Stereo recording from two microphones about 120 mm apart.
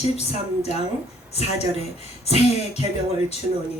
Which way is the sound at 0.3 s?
60° left (ahead or behind).